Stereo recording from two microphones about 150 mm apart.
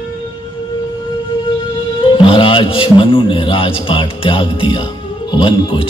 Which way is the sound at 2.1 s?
35° left (ahead or behind).